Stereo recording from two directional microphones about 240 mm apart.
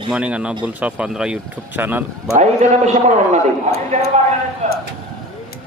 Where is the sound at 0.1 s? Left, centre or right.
Centre.